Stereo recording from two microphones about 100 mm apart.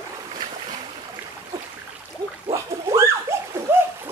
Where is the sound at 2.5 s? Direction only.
30° right (ahead or behind).